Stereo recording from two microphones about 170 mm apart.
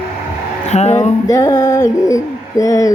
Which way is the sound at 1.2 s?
20° left (ahead or behind).